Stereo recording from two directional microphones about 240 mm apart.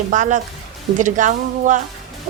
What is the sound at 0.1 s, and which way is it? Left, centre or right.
A woman's voice, right.